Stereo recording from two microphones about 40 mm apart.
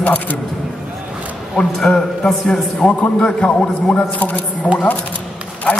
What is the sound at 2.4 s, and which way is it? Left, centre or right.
Speech, centre.